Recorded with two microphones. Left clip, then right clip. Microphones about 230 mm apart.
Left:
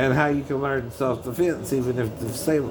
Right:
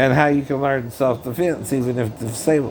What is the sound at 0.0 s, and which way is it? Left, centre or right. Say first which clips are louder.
Speech: right 5 dB; right.